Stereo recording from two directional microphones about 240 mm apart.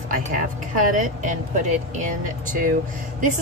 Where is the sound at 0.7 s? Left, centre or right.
Right.